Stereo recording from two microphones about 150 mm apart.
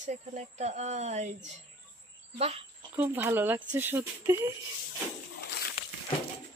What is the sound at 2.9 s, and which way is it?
Speech, 15° right (ahead or behind).